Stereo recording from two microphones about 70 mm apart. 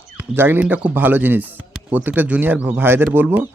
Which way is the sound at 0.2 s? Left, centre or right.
Right.